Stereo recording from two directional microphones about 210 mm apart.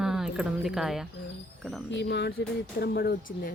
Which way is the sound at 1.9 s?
55° left (ahead or behind).